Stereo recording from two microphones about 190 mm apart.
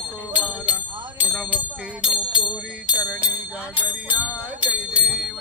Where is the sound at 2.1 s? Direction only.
25° left (ahead or behind).